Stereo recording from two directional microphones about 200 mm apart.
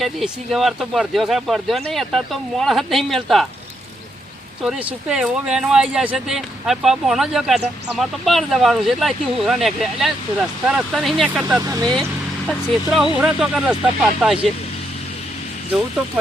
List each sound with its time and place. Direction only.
0.0 s speech: centre (ahead or behind)
4.6 s speech: 5° right (ahead or behind)
11.6 s speech: 20° right (ahead or behind)
12.5 s speech: centre (ahead or behind)